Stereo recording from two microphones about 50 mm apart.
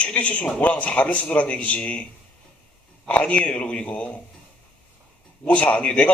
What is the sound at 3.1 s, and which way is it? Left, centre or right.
A man's voice, left.